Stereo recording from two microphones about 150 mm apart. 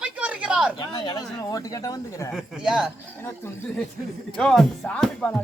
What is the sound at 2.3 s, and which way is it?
Speech, 5° right (ahead or behind).